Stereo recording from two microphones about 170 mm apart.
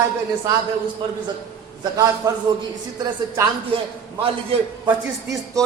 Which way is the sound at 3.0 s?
20° right (ahead or behind).